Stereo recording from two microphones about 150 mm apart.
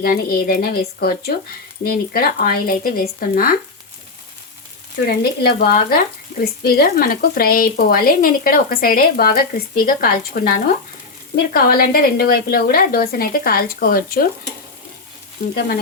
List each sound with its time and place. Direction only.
0.0 s speech: 85° left; by 3.6 s 70° left (ahead or behind)
5.0 s speech: 90° left; by 10.6 s 75° left (ahead or behind)
11.5 s speech: 90° left